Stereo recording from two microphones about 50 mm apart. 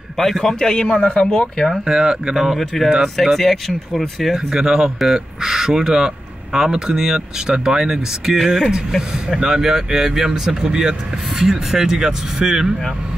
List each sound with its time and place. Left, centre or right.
0.2 s a man's voice: centre
1.0 s speech: left
1.9 s speech: centre
2.6 s a man's voice: centre
4.2 s speech: centre
8.4 s speech: centre
9.4 s speech: centre